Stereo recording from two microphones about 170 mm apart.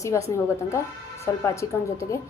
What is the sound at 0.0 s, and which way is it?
A woman's voice, 15° left (ahead or behind).